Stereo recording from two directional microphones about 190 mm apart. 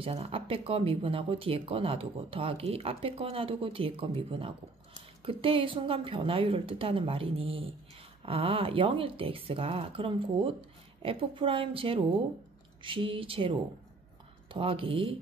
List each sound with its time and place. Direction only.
0.0 s speech: 30° right (ahead or behind)